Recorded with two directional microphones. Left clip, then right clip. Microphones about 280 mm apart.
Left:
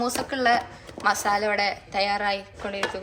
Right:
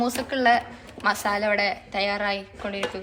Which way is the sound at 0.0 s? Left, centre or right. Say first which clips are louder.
Right 1 dB; centre.